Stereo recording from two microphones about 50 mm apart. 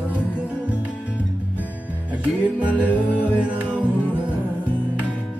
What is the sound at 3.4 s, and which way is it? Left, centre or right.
Music, right.